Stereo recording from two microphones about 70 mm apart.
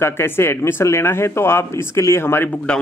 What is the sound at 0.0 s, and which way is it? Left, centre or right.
Speech, left.